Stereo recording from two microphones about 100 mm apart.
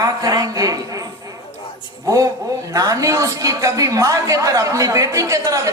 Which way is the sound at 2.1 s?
35° right (ahead or behind).